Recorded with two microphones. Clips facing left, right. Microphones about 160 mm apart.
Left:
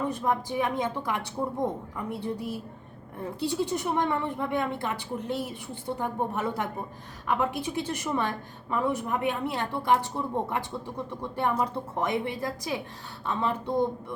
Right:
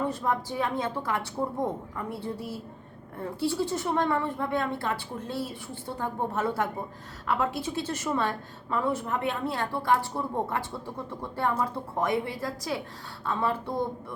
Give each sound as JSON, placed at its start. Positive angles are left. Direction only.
{"t": 0.1, "sound": "a woman's voice", "side_deg": 15}